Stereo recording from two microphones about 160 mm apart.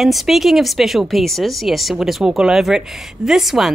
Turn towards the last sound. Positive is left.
turn(degrees=0)  # may be behind; listen again after turning